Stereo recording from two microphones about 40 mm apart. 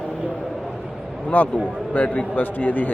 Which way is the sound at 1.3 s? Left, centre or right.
Left.